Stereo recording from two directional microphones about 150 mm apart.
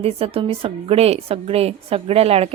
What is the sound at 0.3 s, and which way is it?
A woman's voice, 40° right (ahead or behind).